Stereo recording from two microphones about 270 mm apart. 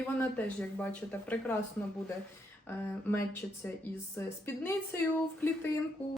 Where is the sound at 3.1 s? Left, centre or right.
Centre.